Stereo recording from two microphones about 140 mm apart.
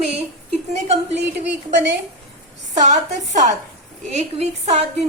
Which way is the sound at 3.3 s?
60° right (ahead or behind).